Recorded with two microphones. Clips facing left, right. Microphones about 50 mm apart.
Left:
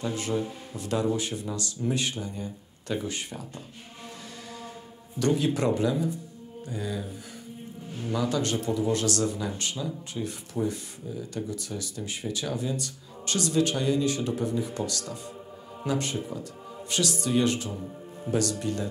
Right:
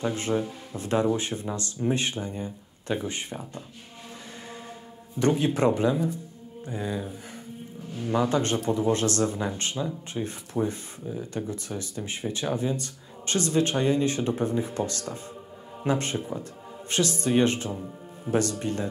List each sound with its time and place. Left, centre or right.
0.0 s speech: right
5.2 s speech: right